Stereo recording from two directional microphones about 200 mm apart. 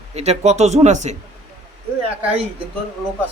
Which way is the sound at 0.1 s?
35° right (ahead or behind).